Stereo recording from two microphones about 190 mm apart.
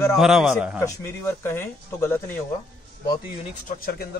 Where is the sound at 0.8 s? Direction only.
10° left (ahead or behind).